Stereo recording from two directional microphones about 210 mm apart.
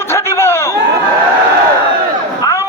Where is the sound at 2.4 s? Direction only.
20° left (ahead or behind).